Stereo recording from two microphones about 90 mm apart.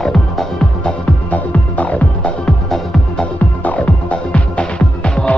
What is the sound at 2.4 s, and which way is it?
Music, 5° left (ahead or behind).